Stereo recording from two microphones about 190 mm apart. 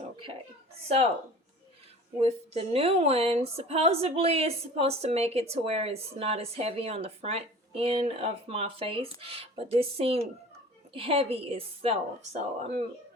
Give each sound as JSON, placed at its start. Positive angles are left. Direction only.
{"t": 0.9, "sound": "speech", "side_deg": -30}
{"t": 2.2, "sound": "speech", "side_deg": -30}